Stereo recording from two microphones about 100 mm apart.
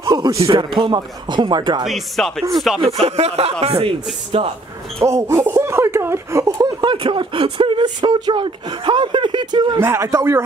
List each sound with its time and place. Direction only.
0.0 s a sound: 35° right (ahead or behind)
0.6 s speech: 50° right (ahead or behind)
1.9 s speech: 5° left (ahead or behind)
3.0 s speech: 90° right; by 4.5 s 65° right (ahead or behind)
5.0 s speech: 30° right (ahead or behind)
6.8 s speech: 55° right (ahead or behind)
9.8 s speech: 25° right (ahead or behind)